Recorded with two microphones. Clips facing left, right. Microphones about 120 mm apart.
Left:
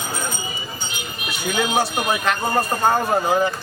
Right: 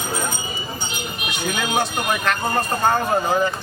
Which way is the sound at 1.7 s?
10° left (ahead or behind).